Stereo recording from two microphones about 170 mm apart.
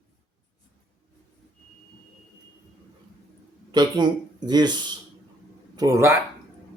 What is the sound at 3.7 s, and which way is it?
Speech, 25° right (ahead or behind).